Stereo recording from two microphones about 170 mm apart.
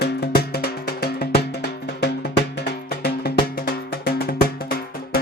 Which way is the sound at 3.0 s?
65° left (ahead or behind).